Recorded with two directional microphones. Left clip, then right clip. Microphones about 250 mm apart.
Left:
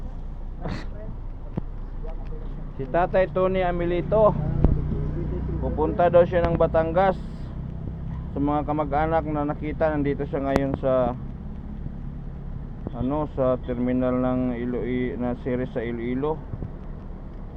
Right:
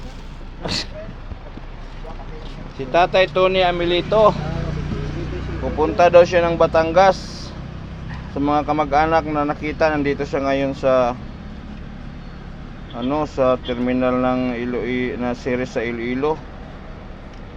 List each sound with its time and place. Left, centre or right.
0.6 s speech: right
2.7 s speech: centre
5.6 s speech: centre
8.4 s speech: centre
13.0 s speech: centre